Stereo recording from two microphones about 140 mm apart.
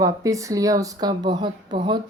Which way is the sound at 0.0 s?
25° right (ahead or behind).